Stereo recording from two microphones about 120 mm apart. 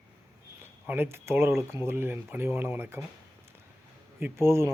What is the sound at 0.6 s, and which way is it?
Speech, 20° right (ahead or behind).